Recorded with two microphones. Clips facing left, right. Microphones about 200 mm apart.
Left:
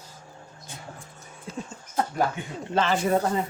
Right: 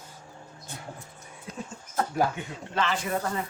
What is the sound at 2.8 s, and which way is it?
Speech, 35° left (ahead or behind).